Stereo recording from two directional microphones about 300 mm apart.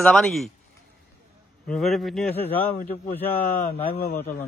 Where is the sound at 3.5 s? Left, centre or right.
Left.